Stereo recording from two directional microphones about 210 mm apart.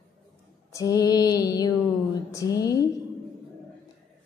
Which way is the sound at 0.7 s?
15° left (ahead or behind).